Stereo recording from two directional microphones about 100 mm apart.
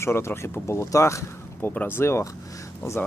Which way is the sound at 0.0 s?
25° left (ahead or behind).